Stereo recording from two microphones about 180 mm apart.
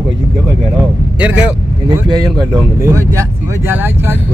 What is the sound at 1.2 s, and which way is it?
Speech, 5° right (ahead or behind).